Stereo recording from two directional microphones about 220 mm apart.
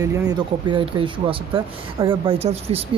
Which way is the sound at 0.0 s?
15° right (ahead or behind).